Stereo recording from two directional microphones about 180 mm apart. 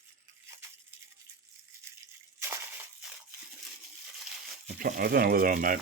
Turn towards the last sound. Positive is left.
turn(degrees=-50)  # may be behind; listen again after turning